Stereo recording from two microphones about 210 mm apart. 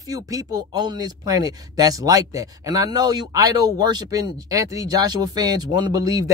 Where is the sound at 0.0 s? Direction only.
15° right (ahead or behind).